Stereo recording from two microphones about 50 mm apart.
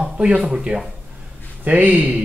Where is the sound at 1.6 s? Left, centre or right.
Right.